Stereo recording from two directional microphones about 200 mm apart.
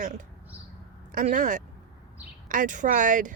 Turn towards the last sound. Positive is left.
turn(degrees=-40)  # may be behind; listen again after turning